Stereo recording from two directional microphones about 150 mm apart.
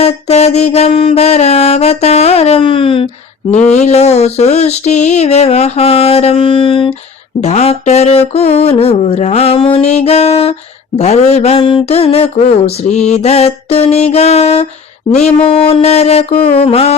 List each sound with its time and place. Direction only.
0.0 s mantra: 45° left (ahead or behind)
3.7 s mantra: 45° left (ahead or behind)
16.6 s music: 40° left (ahead or behind)